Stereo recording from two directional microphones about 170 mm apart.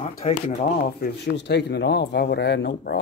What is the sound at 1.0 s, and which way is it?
Speech, 75° left (ahead or behind).